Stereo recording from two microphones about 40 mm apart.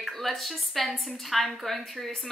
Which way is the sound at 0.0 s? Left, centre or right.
Centre.